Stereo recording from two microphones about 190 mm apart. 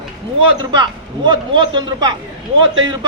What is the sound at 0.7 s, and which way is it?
A man's voice, 25° right (ahead or behind).